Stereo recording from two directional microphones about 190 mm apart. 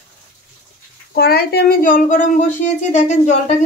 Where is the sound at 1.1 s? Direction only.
55° left (ahead or behind); by 3.5 s 40° left (ahead or behind).